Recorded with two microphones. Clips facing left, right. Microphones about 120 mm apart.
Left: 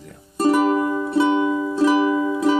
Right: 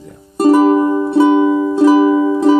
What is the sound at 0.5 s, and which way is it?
Music, 40° right (ahead or behind).